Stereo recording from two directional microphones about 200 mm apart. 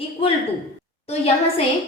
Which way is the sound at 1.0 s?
30° left (ahead or behind).